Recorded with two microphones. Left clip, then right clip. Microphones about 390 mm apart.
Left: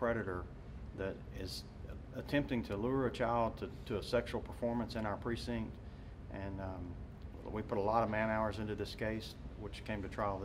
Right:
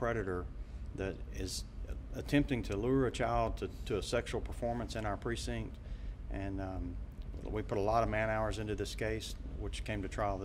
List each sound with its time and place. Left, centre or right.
0.0 s a man's voice: centre